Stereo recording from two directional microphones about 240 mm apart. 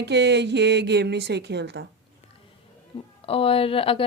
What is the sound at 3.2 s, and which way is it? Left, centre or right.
Speech, left.